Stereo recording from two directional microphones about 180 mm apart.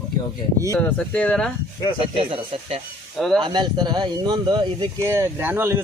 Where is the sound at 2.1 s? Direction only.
30° right (ahead or behind).